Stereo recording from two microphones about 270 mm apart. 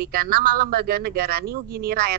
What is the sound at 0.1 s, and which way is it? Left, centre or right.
A woman's voice, right.